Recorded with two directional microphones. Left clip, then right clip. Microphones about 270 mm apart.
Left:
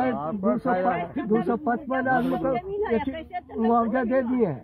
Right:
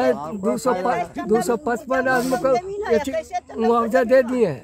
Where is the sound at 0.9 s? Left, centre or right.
Right.